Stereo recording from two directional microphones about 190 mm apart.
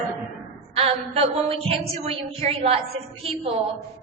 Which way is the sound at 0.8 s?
30° right (ahead or behind).